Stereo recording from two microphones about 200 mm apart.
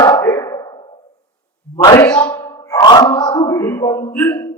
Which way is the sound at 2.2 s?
10° left (ahead or behind).